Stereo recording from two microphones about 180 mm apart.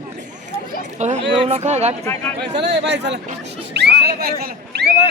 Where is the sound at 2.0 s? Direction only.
15° left (ahead or behind).